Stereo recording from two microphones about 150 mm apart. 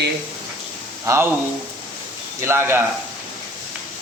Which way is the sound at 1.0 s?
15° right (ahead or behind).